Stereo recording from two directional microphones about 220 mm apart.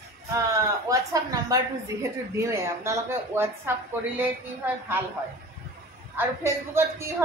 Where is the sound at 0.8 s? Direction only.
15° right (ahead or behind).